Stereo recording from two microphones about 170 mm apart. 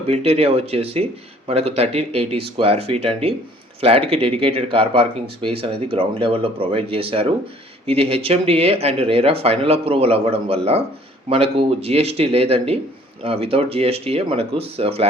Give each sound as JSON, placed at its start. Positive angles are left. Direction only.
{"t": 0.1, "sound": "speech", "side_deg": -40}